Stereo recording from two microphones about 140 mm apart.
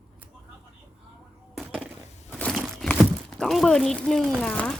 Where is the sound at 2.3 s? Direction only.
10° left (ahead or behind).